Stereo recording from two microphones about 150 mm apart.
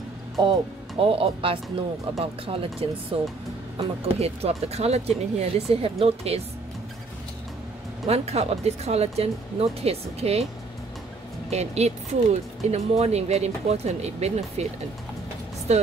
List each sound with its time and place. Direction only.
0.4 s speech: 35° right (ahead or behind)
8.1 s speech: 45° right (ahead or behind)
11.5 s speech: 45° right (ahead or behind)
15.7 s speech: 45° right (ahead or behind)